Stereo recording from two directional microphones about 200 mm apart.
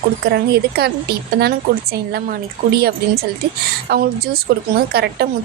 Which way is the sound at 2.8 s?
50° right (ahead or behind).